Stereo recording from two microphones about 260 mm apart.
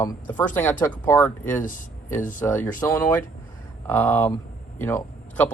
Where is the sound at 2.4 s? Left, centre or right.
Centre.